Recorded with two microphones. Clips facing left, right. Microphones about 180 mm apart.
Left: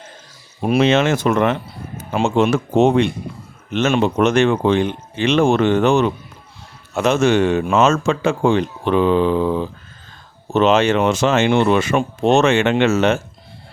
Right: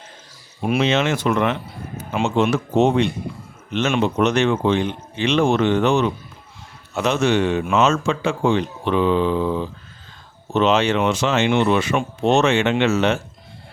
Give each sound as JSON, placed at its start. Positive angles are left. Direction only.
{"t": 0.6, "sound": "speech", "side_deg": 45}